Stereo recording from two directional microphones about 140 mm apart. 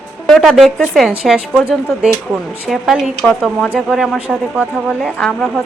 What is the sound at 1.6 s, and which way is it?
Speech, 15° left (ahead or behind).